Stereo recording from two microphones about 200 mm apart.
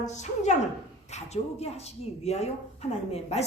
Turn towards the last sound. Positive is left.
turn(degrees=30)  # may be behind; listen again after turning